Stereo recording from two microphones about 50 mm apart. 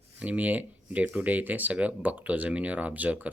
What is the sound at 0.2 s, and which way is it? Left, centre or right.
Speech, right.